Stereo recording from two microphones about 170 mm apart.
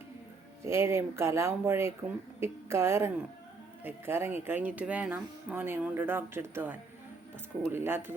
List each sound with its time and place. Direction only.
0.6 s speech: 15° right (ahead or behind)